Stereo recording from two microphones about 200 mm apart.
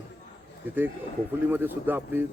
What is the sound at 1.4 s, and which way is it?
Speech, 10° right (ahead or behind).